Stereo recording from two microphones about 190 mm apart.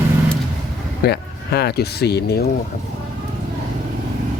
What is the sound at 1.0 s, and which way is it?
Speech, 55° left (ahead or behind).